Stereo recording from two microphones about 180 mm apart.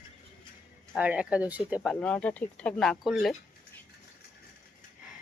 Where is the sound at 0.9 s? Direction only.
5° right (ahead or behind).